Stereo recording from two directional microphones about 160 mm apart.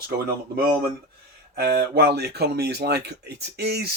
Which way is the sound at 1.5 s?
75° right (ahead or behind).